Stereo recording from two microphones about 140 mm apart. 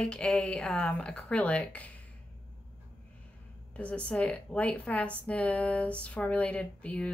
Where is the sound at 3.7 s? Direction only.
10° left (ahead or behind).